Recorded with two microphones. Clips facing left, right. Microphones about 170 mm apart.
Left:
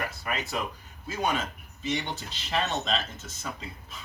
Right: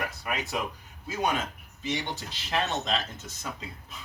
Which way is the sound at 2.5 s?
10° right (ahead or behind).